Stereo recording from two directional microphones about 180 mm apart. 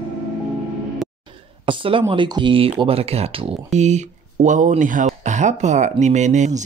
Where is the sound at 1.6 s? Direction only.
30° right (ahead or behind).